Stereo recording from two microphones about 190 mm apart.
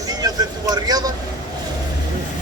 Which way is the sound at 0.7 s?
20° right (ahead or behind).